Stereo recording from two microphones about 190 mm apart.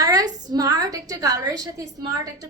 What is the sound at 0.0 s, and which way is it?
A woman's voice, 20° right (ahead or behind).